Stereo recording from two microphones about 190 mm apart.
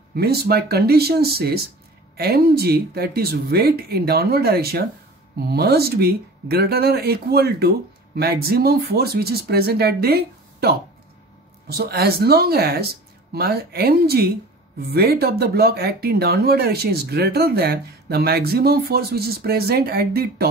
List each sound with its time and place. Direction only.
0.1 s speech: 55° right (ahead or behind)